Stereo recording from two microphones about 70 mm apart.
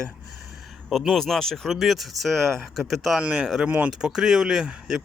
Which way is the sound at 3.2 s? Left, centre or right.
Centre.